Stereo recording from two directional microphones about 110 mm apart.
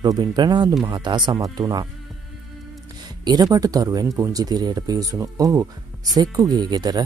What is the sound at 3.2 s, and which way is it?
Speech, 35° right (ahead or behind).